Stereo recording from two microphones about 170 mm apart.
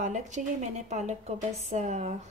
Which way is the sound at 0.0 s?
45° right (ahead or behind).